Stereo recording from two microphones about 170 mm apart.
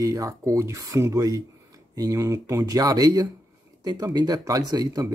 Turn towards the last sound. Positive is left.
turn(degrees=-20)  # may be behind; listen again after turning